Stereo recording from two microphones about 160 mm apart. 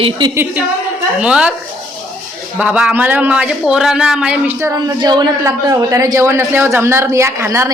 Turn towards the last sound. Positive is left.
turn(degrees=-15)  # may be behind; listen again after turning